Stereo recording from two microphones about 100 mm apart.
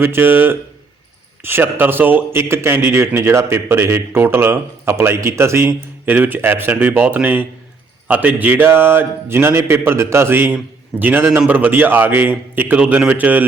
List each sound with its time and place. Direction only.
0.0 s a man's voice: 20° right (ahead or behind)